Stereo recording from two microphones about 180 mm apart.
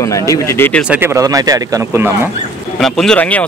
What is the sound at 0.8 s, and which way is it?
Speech, 10° right (ahead or behind).